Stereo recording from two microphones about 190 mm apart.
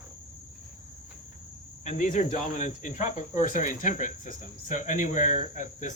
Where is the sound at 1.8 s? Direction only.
40° left (ahead or behind).